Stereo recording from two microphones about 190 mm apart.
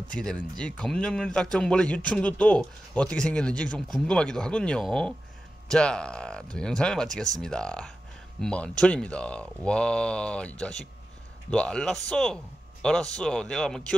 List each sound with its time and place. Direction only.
0.1 s speech: 5° left (ahead or behind)